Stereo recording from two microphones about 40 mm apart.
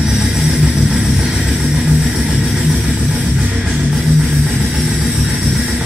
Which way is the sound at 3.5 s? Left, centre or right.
Right.